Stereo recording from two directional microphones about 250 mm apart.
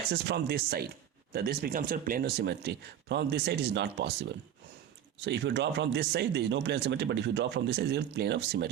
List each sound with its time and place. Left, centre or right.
0.1 s speech: right